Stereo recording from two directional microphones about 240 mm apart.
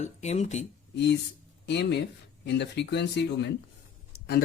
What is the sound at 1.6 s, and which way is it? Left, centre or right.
Speech, left.